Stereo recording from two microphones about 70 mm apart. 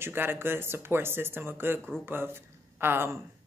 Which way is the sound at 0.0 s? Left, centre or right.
Right.